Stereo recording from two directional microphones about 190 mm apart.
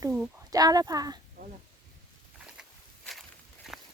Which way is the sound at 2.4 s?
Centre (ahead or behind).